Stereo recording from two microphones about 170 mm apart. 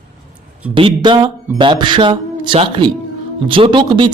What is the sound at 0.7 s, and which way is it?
Speech, 30° right (ahead or behind).